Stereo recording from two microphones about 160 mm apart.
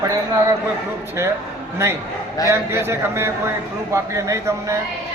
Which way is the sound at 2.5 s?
15° right (ahead or behind).